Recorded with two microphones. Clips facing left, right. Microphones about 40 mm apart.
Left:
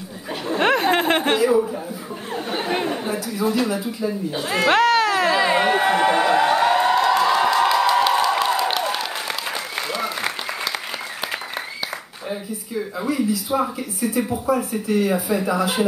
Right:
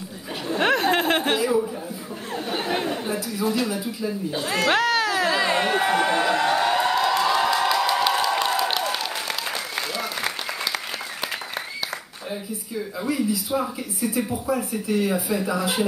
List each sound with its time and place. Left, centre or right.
0.5 s chatter: centre
4.0 s a sound: centre
13.0 s speech: centre